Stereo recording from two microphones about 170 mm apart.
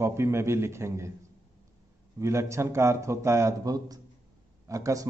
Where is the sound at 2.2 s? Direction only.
15° right (ahead or behind).